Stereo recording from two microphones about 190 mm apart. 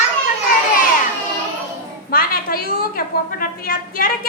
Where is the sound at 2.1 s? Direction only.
50° left (ahead or behind).